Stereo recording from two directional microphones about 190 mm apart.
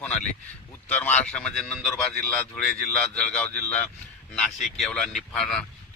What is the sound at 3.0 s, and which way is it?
Speech, 5° left (ahead or behind).